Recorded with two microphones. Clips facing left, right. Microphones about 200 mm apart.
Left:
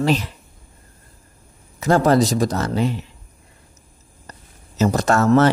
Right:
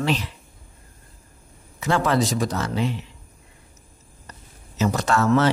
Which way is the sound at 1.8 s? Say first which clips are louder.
Left 6 dB; 40° left (ahead or behind).